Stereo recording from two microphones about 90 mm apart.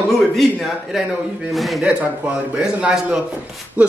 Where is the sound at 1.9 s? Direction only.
15° right (ahead or behind).